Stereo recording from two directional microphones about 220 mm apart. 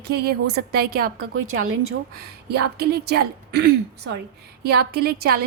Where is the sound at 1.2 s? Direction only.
70° right (ahead or behind).